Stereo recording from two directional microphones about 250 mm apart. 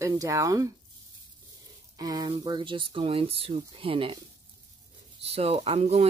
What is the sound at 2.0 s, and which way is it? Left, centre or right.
Speech, centre.